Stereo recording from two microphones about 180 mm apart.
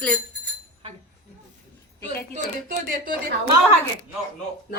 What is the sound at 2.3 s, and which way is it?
Speech, 50° right (ahead or behind).